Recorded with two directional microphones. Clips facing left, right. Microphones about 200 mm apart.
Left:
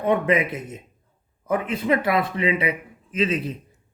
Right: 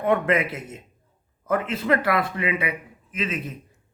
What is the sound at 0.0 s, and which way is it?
A man's voice, 20° left (ahead or behind).